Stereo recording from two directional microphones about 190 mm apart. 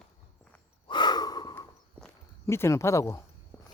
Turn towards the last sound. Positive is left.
turn(degrees=15)  # may be behind; listen again after turning